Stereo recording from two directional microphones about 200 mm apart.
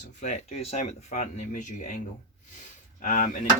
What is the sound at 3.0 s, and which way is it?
Speech, 35° left (ahead or behind).